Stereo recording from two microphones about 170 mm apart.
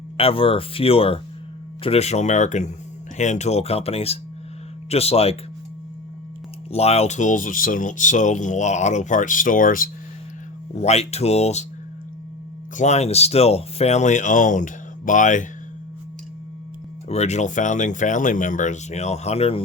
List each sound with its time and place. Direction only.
0.2 s speech: 35° left (ahead or behind)
6.7 s speech: 35° left (ahead or behind); by 9.9 s 55° left (ahead or behind)
10.8 s speech: 40° left (ahead or behind)
12.7 s speech: 40° left (ahead or behind)
17.1 s speech: 40° left (ahead or behind)